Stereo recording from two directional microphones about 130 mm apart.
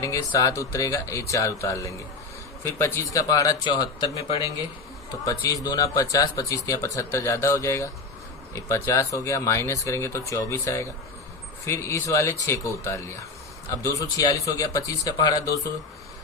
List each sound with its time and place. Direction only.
0.0 s speech: 25° left (ahead or behind)
5.2 s speech: 25° left (ahead or behind)